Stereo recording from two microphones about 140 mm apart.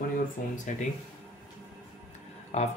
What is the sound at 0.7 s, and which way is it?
Speech, 60° left (ahead or behind).